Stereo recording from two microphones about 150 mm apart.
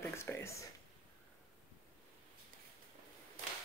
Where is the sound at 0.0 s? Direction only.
15° left (ahead or behind).